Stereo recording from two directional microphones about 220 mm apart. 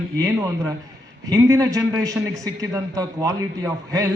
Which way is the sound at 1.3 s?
15° right (ahead or behind).